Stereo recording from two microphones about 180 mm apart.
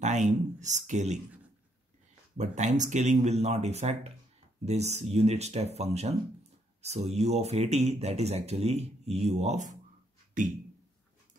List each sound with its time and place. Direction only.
0.0 s speech: 40° right (ahead or behind)
2.3 s speech: 40° right (ahead or behind)